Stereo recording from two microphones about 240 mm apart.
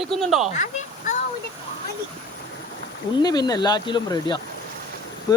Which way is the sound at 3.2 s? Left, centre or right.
Centre.